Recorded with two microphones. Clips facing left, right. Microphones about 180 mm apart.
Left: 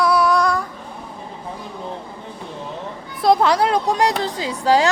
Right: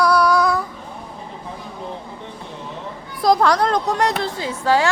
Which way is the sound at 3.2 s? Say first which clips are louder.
Even; 5° left (ahead or behind).